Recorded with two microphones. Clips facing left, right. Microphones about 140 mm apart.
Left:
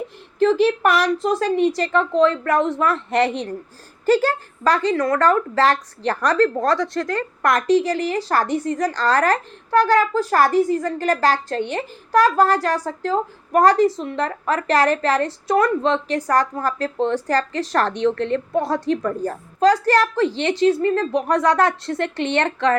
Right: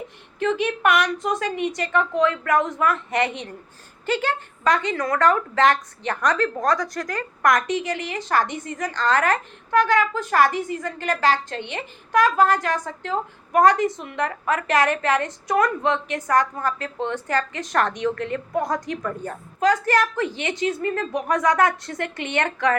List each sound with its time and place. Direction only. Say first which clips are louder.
0.3 s speech: left 7 dB; 35° left (ahead or behind)